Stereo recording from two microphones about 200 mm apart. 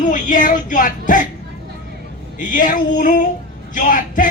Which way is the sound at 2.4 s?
40° left (ahead or behind).